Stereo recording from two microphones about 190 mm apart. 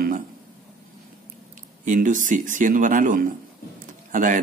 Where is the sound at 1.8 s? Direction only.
40° right (ahead or behind).